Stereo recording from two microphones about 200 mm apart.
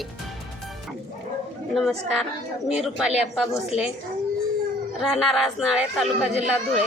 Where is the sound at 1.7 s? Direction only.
Centre (ahead or behind).